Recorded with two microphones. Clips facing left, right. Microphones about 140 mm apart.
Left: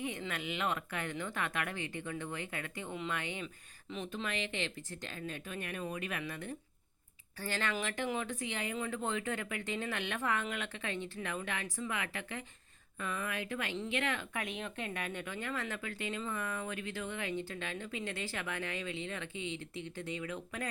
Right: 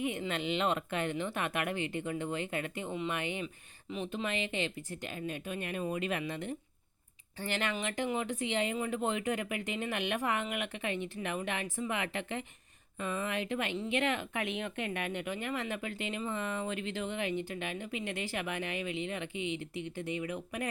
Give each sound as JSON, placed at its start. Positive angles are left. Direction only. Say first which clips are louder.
{"t": 0.0, "sound": "speech", "louder": "right 5 dB", "side_deg": -20}
{"t": 14.4, "sound": "speech", "louder": "right 4 dB", "side_deg": 40}
{"t": 15.1, "sound": "speech", "louder": "right 4 dB", "side_deg": -20}